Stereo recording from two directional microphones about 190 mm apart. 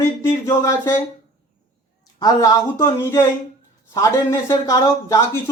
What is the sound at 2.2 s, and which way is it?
Speech, 15° left (ahead or behind).